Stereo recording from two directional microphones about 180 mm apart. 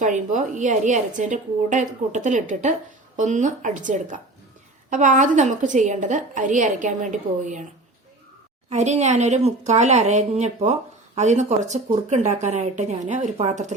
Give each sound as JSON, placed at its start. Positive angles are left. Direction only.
{"t": 0.0, "sound": "a woman's voice", "side_deg": -45}
{"t": 8.7, "sound": "a woman's voice", "side_deg": -40}